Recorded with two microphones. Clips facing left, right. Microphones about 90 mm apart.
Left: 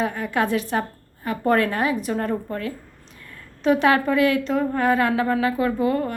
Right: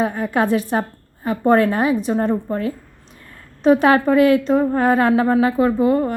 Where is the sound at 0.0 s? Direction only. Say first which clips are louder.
Right 4 dB; 30° right (ahead or behind).